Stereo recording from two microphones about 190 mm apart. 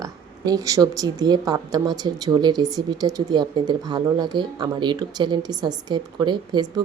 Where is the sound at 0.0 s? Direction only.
20° right (ahead or behind).